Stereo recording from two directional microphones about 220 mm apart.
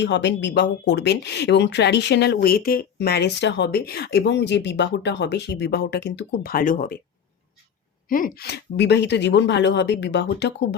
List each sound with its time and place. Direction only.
0.0 s speech: 50° left (ahead or behind)
8.1 s speech: 40° left (ahead or behind)